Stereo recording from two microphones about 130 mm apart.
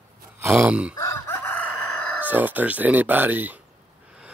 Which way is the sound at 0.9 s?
25° left (ahead or behind).